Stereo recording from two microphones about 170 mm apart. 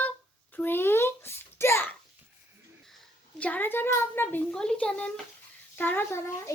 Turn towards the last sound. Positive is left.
turn(degrees=15)  # may be behind; listen again after turning